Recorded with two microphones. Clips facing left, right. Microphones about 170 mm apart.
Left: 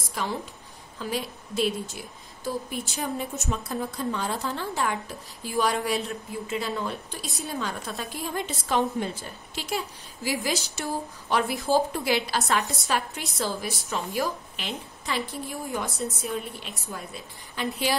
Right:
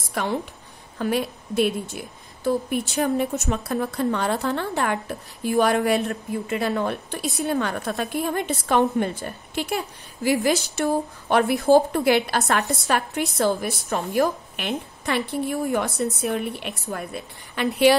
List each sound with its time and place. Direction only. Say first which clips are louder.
0.1 s a woman's voice: right 5 dB; 65° right (ahead or behind)